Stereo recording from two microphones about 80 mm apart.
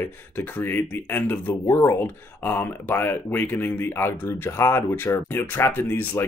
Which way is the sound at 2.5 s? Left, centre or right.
Left.